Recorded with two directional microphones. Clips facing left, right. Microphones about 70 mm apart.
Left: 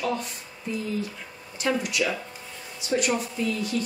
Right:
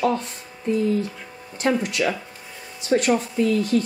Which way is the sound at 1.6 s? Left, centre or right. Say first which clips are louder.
Right 4 dB; right.